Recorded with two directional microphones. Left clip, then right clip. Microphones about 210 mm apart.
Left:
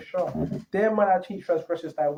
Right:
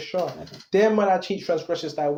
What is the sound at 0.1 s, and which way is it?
Speech, 35° right (ahead or behind).